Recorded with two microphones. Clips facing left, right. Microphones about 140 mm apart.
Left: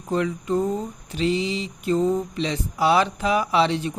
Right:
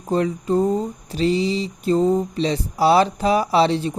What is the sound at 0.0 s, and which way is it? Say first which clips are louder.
Mantra: right 3 dB; 35° right (ahead or behind).